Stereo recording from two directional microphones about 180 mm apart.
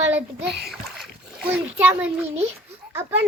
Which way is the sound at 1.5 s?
10° right (ahead or behind).